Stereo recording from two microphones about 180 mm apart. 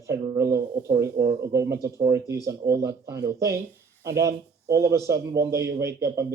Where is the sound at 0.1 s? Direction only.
15° right (ahead or behind).